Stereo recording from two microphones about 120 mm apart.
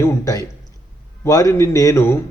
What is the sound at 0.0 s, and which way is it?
A man's voice, 25° left (ahead or behind).